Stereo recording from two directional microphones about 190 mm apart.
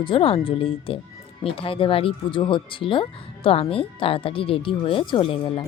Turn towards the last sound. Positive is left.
turn(degrees=25)  # may be behind; listen again after turning